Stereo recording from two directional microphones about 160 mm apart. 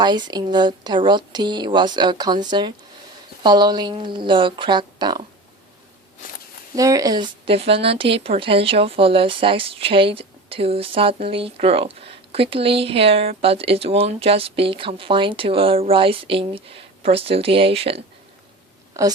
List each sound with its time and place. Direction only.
0.0 s speech: 25° right (ahead or behind)
6.7 s a woman's voice: 20° right (ahead or behind); by 18.0 s 35° right (ahead or behind)
19.0 s speech: 20° right (ahead or behind)